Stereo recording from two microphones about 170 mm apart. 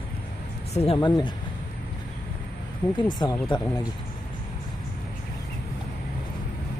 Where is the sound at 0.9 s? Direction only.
25° left (ahead or behind).